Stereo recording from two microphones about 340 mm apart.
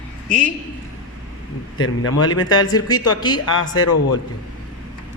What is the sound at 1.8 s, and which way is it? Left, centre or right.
Speech, left.